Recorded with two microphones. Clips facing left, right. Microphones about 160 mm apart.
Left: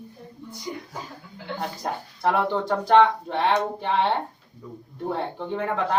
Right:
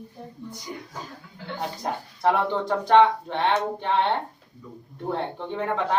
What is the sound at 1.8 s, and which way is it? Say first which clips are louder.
Speech: right 2 dB; centre (ahead or behind).